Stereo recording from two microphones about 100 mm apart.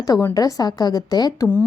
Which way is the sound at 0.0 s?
40° left (ahead or behind).